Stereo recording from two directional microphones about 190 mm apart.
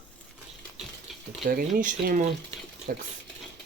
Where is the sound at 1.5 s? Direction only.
50° right (ahead or behind).